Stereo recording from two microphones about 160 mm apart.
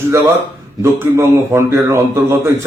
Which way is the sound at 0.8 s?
15° right (ahead or behind).